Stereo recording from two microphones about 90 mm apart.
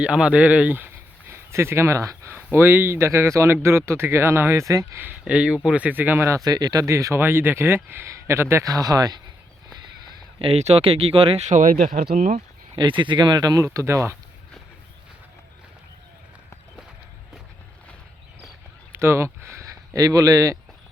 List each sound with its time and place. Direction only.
0.0 s speech: 10° right (ahead or behind); by 4.9 s 35° right (ahead or behind)
5.2 s speech: 15° right (ahead or behind)
6.4 s speech: 45° right (ahead or behind)
10.4 s speech: 90° right
12.7 s speech: 60° right (ahead or behind); by 13.7 s 45° right (ahead or behind)
13.7 s speech: 30° right (ahead or behind)
18.9 s speech: 30° right (ahead or behind)